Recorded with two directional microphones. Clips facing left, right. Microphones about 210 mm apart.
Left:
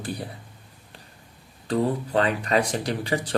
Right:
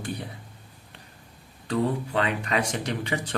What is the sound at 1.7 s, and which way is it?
Speech, 35° left (ahead or behind).